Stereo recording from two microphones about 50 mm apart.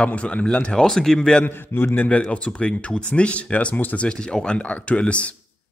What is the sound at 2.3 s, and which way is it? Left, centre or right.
Speech, left.